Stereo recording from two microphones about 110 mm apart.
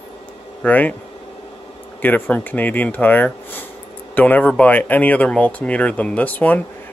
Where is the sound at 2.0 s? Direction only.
15° left (ahead or behind).